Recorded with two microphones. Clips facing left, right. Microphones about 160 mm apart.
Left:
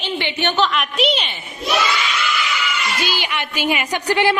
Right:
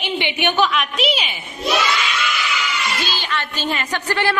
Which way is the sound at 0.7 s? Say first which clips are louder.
Left 1 dB; centre (ahead or behind).